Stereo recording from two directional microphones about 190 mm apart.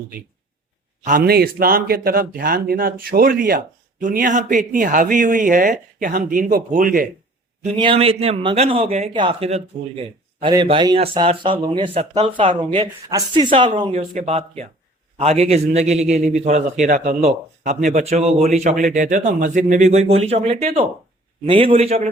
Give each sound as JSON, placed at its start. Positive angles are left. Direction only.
{"t": 1.0, "sound": "speech", "side_deg": -50}
{"t": 7.8, "sound": "a man's voice", "side_deg": -30}
{"t": 13.7, "sound": "a man's voice", "side_deg": -40}